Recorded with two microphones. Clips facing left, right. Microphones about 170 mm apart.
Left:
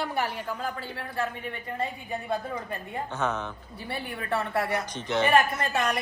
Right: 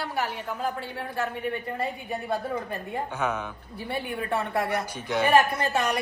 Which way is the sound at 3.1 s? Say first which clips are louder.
Left 1 dB; 10° right (ahead or behind).